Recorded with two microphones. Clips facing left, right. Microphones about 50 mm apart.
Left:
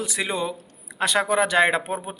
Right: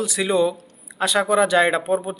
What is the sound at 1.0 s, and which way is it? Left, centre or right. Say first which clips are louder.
A man's voice: right 3 dB; left.